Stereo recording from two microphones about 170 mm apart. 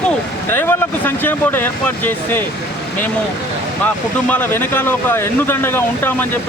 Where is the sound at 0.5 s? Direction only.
10° left (ahead or behind).